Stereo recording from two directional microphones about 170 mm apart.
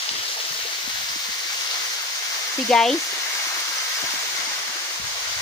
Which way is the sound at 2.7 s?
5° left (ahead or behind).